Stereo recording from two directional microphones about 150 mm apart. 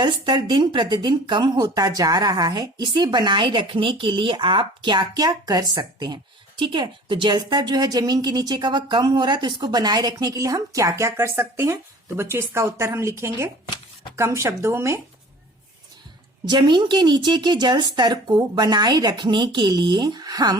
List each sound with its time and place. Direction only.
0.0 s a woman's voice: 30° right (ahead or behind)
16.5 s a woman's voice: 30° right (ahead or behind)